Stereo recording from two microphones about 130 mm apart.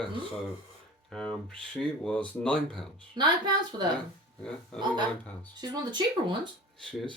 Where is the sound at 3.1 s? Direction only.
35° right (ahead or behind).